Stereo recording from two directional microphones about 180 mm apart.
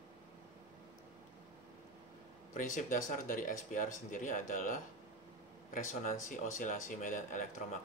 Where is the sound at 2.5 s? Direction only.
45° left (ahead or behind).